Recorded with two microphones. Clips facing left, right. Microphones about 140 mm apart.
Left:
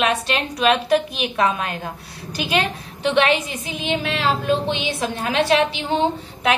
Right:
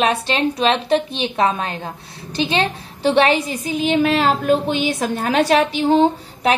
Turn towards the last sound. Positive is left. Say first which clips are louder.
# right 3 dB
turn(degrees=-40)  # may be behind; listen again after turning